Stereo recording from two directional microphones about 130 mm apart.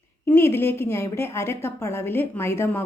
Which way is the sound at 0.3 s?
15° left (ahead or behind).